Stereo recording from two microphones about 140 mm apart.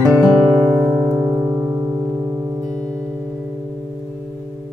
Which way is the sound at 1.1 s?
15° right (ahead or behind).